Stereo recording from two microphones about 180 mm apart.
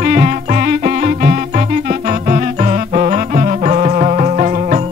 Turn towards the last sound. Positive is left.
turn(degrees=-40)  # may be behind; listen again after turning